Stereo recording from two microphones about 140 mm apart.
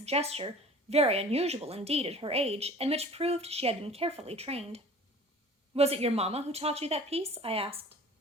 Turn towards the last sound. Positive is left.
turn(degrees=-45)  # may be behind; listen again after turning